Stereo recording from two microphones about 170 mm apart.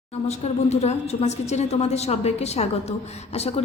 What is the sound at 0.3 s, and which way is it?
A woman's voice, 40° left (ahead or behind).